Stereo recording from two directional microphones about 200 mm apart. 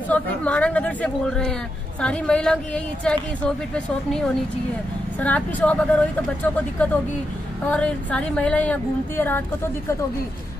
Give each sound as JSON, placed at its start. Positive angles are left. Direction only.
{"t": 0.1, "sound": "a woman's voice", "side_deg": 5}